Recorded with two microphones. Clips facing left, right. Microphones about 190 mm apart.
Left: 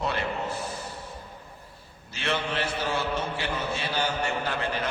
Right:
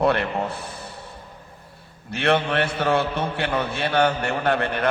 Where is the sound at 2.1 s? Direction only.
60° right (ahead or behind).